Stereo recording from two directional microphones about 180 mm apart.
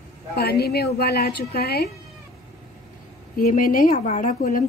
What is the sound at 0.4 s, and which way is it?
A woman's voice, 60° left (ahead or behind).